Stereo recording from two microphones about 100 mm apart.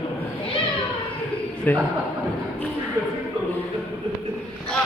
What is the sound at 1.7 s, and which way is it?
Speech, 20° left (ahead or behind).